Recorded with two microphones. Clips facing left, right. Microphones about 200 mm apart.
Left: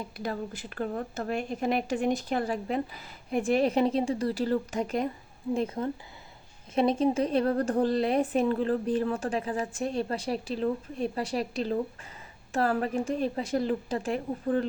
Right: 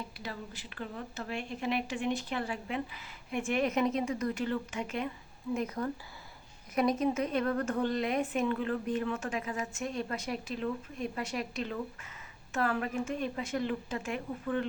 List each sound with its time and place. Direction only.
0.2 s a woman's voice: 45° left (ahead or behind)
5.5 s a woman's voice: 25° left (ahead or behind)